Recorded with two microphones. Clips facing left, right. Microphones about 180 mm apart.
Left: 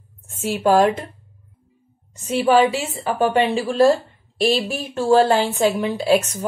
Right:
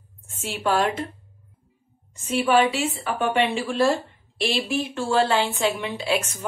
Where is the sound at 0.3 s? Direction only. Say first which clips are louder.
Left 7 dB; 40° left (ahead or behind).